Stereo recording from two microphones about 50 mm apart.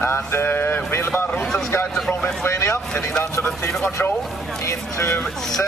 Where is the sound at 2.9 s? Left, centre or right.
Left.